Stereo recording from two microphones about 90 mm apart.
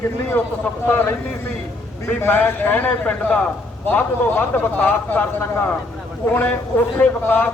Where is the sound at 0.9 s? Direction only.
25° left (ahead or behind).